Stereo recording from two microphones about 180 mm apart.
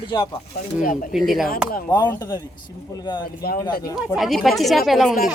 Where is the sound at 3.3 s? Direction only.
60° left (ahead or behind).